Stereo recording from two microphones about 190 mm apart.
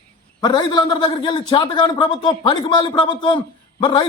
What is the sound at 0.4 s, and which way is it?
A man's voice, 25° left (ahead or behind).